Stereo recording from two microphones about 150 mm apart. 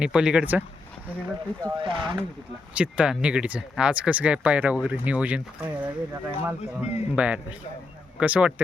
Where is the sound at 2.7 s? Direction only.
10° right (ahead or behind).